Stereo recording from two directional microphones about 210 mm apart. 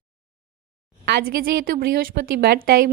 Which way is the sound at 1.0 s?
45° right (ahead or behind).